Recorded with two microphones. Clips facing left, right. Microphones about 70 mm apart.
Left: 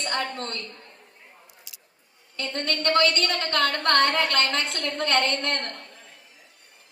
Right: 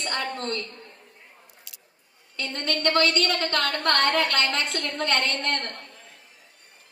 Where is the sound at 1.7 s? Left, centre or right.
Centre.